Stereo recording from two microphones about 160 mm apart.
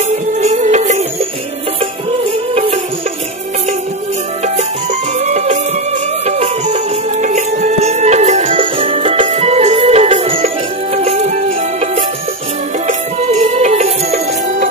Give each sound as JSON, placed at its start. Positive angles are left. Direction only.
{"t": 0.4, "sound": "music", "side_deg": -45}
{"t": 5.2, "sound": "music", "side_deg": -45}
{"t": 9.2, "sound": "music", "side_deg": -45}